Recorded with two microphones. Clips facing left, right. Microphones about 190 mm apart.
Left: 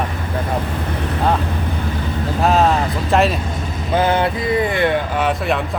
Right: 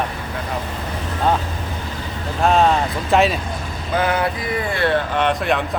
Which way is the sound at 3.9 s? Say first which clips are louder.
Left 3 dB; 30° left (ahead or behind).